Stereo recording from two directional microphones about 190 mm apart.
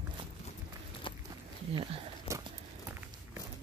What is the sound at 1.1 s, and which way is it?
Walk, 25° left (ahead or behind).